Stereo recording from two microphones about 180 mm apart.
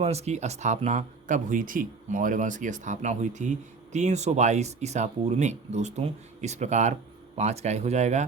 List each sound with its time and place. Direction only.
0.0 s speech: 35° right (ahead or behind)